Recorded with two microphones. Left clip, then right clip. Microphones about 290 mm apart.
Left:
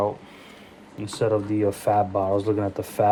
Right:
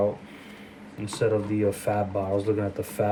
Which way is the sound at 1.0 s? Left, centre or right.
Centre.